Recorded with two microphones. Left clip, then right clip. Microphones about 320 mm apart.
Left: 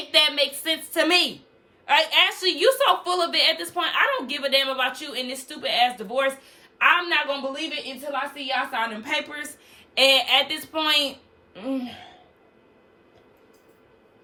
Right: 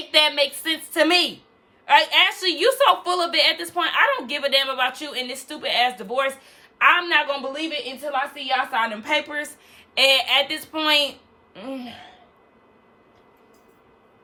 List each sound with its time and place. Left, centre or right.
0.1 s a woman's voice: centre